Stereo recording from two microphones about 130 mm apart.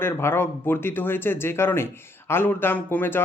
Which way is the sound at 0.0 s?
20° left (ahead or behind).